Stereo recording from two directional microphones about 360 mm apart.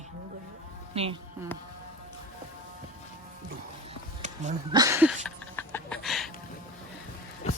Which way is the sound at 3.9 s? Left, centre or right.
Centre.